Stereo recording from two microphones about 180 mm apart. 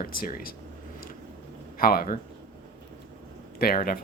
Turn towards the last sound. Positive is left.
turn(degrees=55)  # may be behind; listen again after turning